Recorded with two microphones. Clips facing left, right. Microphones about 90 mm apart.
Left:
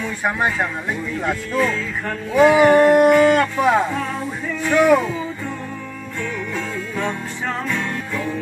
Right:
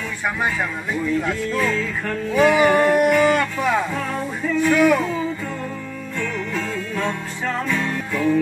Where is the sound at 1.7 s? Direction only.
20° left (ahead or behind).